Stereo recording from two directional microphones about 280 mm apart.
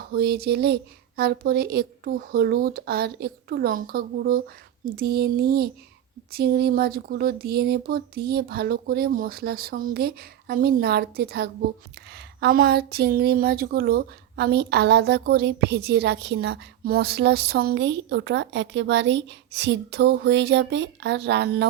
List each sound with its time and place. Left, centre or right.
0.1 s a woman's voice: right